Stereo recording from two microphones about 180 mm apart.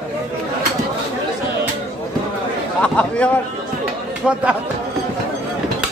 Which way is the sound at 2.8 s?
5° left (ahead or behind).